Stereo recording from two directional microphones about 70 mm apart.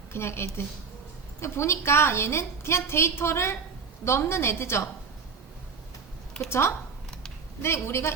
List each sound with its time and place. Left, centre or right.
0.1 s a woman's voice: left
6.5 s a woman's voice: left